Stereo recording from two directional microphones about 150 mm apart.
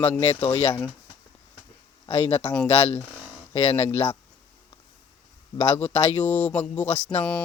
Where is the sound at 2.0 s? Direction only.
40° left (ahead or behind).